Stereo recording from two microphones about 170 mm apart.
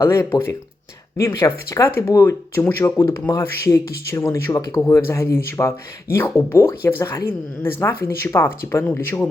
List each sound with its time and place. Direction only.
0.0 s speech: 15° left (ahead or behind)